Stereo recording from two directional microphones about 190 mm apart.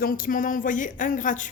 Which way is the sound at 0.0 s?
50° left (ahead or behind).